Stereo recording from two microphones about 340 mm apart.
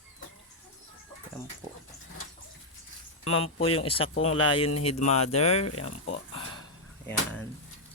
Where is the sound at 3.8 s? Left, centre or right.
Centre.